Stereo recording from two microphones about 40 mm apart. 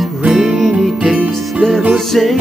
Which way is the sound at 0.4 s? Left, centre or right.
Centre.